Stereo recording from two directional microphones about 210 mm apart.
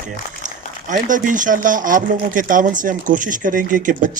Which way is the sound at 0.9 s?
40° right (ahead or behind).